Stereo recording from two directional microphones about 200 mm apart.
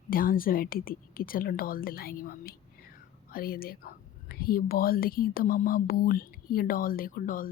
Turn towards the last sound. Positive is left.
turn(degrees=45)  # may be behind; listen again after turning